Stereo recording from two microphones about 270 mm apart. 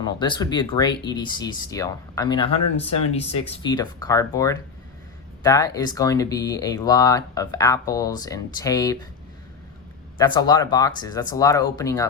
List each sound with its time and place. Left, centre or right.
0.0 s speech: centre
10.2 s speech: centre